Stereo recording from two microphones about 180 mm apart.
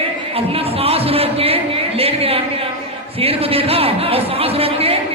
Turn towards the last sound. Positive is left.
turn(degrees=-35)  # may be behind; listen again after turning